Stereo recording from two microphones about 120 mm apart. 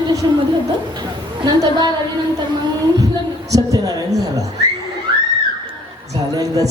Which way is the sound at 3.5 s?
30° right (ahead or behind).